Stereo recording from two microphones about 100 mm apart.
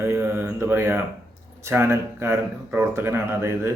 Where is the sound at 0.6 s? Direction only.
25° right (ahead or behind).